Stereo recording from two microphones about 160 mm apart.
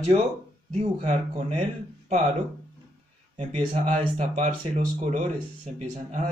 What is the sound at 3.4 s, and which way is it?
Speech, 50° right (ahead or behind).